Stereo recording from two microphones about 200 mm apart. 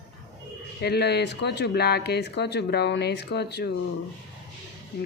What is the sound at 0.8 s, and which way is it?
Speech, 55° left (ahead or behind).